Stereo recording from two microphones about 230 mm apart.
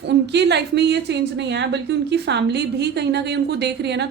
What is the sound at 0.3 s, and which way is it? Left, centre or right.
A woman's voice, right.